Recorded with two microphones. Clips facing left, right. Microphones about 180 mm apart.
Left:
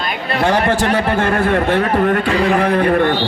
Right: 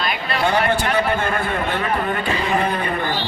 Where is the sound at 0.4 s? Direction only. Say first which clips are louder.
Left 4 dB; 90° left.